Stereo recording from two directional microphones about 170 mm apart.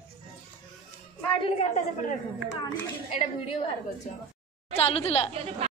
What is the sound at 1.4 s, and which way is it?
Speech, 40° left (ahead or behind).